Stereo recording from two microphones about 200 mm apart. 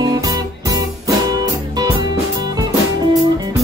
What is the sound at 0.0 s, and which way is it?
Music, 20° right (ahead or behind).